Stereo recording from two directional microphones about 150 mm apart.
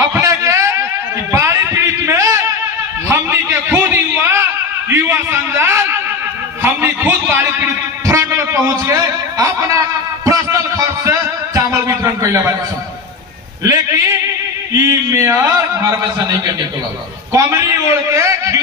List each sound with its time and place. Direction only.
0.0 s a sound: 20° right (ahead or behind)
13.7 s a man's voice: 20° right (ahead or behind)
17.3 s a man's voice: 20° right (ahead or behind)